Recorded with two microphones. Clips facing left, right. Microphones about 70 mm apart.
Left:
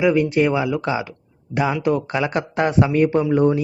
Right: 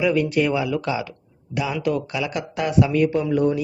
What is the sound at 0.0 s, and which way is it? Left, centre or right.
Speech, left.